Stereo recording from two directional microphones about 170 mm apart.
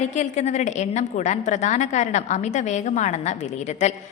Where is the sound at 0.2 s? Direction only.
45° left (ahead or behind).